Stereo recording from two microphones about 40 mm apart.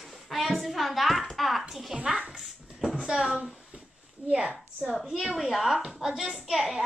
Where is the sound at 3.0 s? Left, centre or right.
Centre.